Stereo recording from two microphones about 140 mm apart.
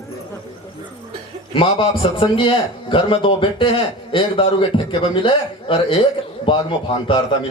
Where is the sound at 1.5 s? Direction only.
40° left (ahead or behind).